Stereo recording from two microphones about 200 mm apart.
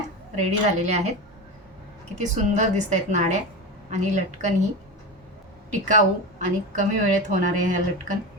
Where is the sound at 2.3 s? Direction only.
35° right (ahead or behind).